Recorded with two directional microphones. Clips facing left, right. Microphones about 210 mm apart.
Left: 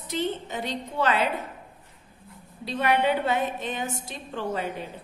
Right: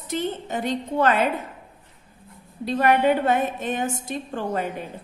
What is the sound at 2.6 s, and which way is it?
A woman's voice, 50° right (ahead or behind).